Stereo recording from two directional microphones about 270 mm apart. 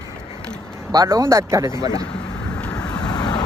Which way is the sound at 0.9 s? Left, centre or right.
Centre.